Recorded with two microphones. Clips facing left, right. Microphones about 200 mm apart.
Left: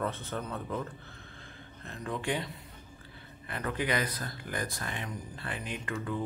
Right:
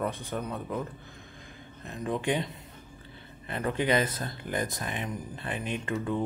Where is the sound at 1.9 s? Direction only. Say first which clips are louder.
Right 4 dB; 20° right (ahead or behind).